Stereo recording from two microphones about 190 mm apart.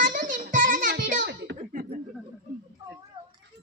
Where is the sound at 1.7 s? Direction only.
45° right (ahead or behind).